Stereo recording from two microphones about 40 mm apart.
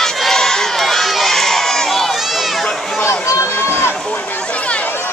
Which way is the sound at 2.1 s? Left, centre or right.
Centre.